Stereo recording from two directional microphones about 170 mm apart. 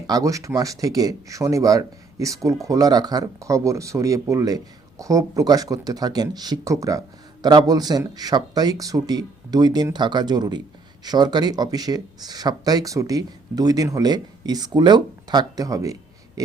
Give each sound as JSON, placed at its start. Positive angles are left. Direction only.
{"t": 0.1, "sound": "speech", "side_deg": -20}